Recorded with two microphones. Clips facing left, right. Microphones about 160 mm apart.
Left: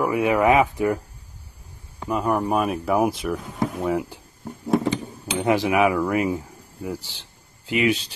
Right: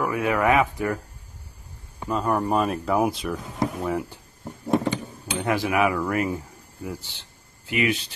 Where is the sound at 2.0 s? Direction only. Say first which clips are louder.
Left 1 dB; 10° left (ahead or behind).